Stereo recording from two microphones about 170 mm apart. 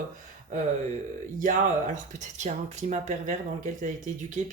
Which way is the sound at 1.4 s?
50° right (ahead or behind).